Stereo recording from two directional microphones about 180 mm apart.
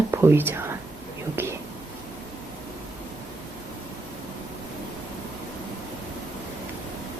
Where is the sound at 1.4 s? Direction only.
10° right (ahead or behind).